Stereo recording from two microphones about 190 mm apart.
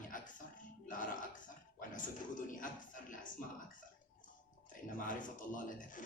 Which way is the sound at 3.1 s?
45° left (ahead or behind).